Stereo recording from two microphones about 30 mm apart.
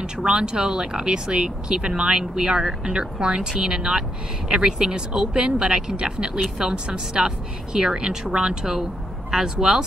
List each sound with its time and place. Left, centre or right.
0.0 s a woman's voice: right